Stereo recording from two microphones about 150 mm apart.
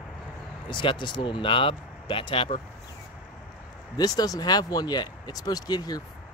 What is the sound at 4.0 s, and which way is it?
Speech, 25° left (ahead or behind).